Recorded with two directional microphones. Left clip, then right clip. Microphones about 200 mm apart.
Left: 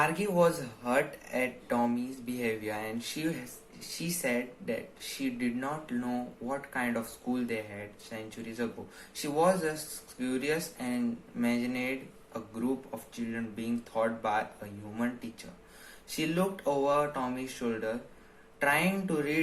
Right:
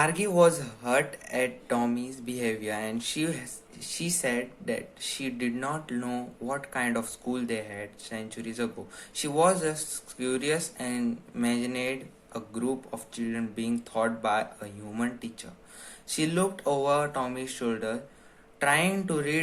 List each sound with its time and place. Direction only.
0.0 s speech: 35° right (ahead or behind)